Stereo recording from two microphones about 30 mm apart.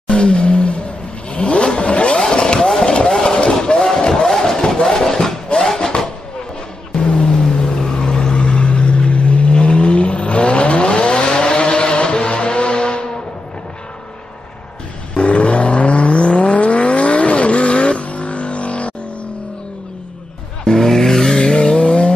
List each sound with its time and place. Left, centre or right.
0.1 s a sound: left
1.3 s vehicle: left
3.1 s a sound: centre
3.7 s a sound: left
4.1 s a sound: centre
5.8 s vehicle: left
7.0 s vehicle: left
8.5 s vehicle: left
9.6 s vehicle: left
10.9 s vehicle: left
15.1 s vehicle: left
20.6 s vehicle: centre
21.7 s vehicle: left